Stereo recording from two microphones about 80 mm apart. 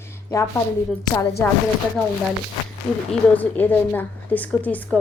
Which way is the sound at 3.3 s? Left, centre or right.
Left.